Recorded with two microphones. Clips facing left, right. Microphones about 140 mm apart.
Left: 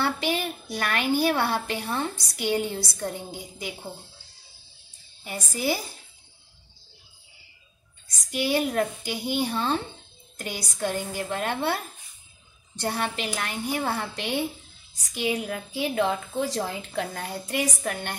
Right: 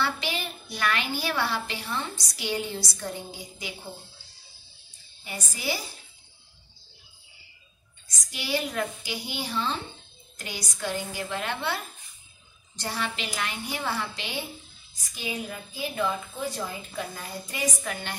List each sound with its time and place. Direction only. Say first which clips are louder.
0.0 s a child's voice: left 4 dB; 50° left (ahead or behind)
5.2 s a child's voice: left 5 dB; 45° left (ahead or behind)
8.3 s a child's voice: left 6 dB; 55° left (ahead or behind)
15.1 s a woman's voice: left 6 dB; 65° left (ahead or behind)